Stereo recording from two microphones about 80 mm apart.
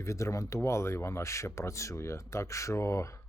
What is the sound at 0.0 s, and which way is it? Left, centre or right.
Speech, left.